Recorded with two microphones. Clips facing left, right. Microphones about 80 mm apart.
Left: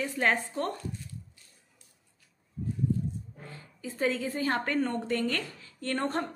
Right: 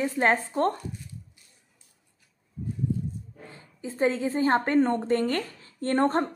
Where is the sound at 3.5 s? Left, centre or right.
Right.